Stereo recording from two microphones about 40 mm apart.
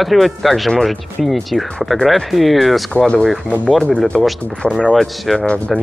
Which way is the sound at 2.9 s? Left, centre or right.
Left.